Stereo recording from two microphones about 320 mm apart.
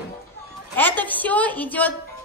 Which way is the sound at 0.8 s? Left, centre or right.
Centre.